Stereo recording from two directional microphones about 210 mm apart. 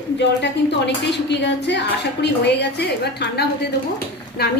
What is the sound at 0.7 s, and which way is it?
A woman's voice, 55° left (ahead or behind).